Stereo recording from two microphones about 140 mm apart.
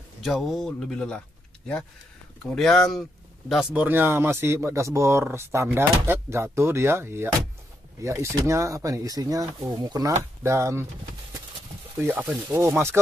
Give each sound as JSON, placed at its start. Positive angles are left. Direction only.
{"t": 0.2, "sound": "speech", "side_deg": 0}
{"t": 2.5, "sound": "speech", "side_deg": 0}
{"t": 3.7, "sound": "speech", "side_deg": -15}
{"t": 12.0, "sound": "speech", "side_deg": -15}